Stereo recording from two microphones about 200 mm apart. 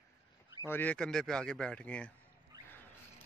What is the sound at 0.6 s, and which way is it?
Speech, 10° left (ahead or behind).